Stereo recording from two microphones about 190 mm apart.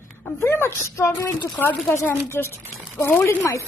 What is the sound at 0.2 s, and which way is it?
Speech, 15° left (ahead or behind).